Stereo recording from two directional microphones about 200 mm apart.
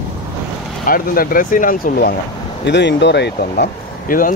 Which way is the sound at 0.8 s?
45° left (ahead or behind).